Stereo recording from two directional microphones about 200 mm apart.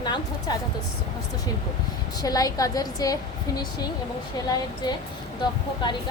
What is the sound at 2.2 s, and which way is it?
Speech, 20° left (ahead or behind).